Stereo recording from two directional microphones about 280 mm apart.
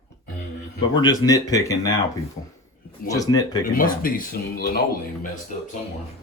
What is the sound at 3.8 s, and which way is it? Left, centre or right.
Speech, left.